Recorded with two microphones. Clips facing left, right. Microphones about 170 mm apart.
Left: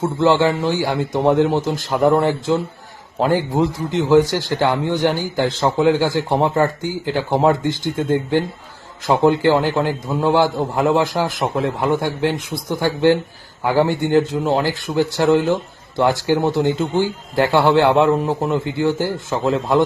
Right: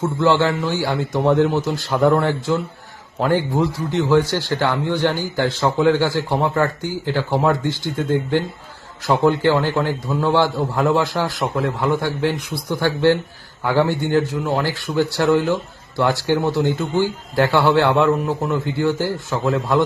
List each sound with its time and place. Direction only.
0.0 s a man's voice: 15° left (ahead or behind)